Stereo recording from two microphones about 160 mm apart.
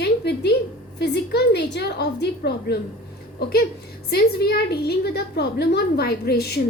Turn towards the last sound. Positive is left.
turn(degrees=90)